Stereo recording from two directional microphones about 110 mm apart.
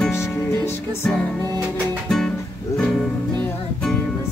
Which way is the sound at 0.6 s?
20° left (ahead or behind).